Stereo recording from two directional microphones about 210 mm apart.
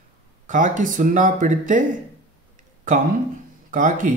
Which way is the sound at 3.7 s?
40° right (ahead or behind).